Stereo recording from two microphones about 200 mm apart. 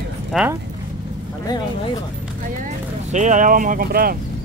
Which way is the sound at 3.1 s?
40° right (ahead or behind).